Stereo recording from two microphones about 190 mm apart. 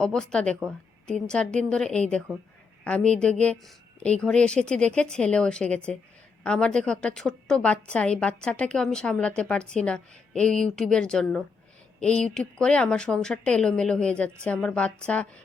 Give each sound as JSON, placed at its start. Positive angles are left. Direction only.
{"t": 0.0, "sound": "a woman's voice", "side_deg": 5}